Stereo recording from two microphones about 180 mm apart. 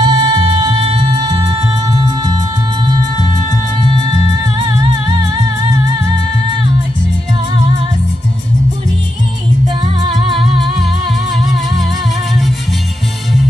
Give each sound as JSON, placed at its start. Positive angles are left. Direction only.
{"t": 0.0, "sound": "music", "side_deg": -25}